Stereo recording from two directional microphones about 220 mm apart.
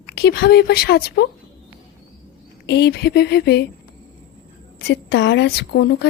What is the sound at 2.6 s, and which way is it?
Speech, 50° left (ahead or behind).